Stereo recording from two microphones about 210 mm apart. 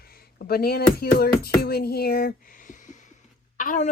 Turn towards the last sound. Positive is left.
turn(degrees=40)  # may be behind; listen again after turning